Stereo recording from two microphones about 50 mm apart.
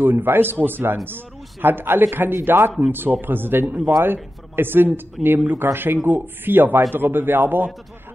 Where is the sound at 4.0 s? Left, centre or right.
Right.